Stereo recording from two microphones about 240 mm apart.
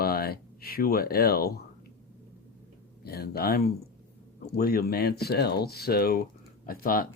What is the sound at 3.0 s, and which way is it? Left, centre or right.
Speech, left.